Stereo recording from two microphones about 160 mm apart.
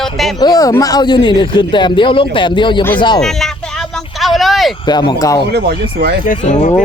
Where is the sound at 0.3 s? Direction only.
25° left (ahead or behind).